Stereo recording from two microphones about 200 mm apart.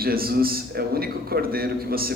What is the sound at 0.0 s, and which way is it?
A man's voice, 50° right (ahead or behind).